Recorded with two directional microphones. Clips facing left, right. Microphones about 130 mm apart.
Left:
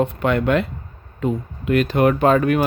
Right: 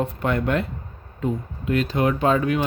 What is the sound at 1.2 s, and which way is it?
Speech, 70° left (ahead or behind).